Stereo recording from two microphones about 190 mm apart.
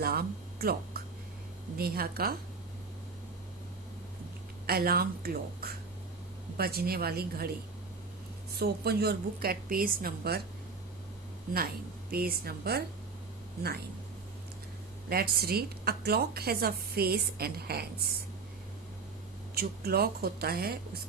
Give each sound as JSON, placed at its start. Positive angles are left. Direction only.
{"t": 0.0, "sound": "speech", "side_deg": -55}
{"t": 4.6, "sound": "speech", "side_deg": -55}
{"t": 8.5, "sound": "a woman's voice", "side_deg": -55}
{"t": 12.1, "sound": "a woman's voice", "side_deg": -55}
{"t": 15.1, "sound": "a woman's voice", "side_deg": -55}
{"t": 19.5, "sound": "a woman's voice", "side_deg": -55}